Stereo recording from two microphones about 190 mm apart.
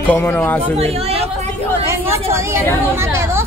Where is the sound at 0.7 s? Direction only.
35° right (ahead or behind).